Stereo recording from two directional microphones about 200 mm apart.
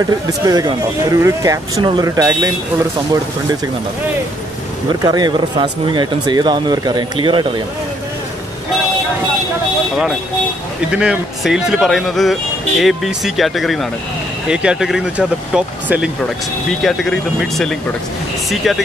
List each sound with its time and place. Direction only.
0.0 s speech: 15° right (ahead or behind)
5.0 s speech: 20° right (ahead or behind)
10.9 s speech: 5° right (ahead or behind)